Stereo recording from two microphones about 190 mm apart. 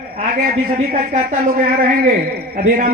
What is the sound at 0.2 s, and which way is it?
A man's voice, 45° right (ahead or behind).